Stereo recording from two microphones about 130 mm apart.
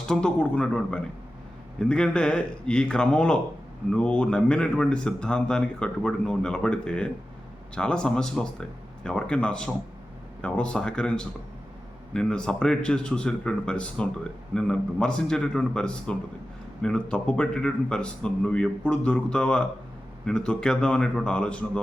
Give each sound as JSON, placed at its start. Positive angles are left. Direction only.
{"t": 0.1, "sound": "speech", "side_deg": 5}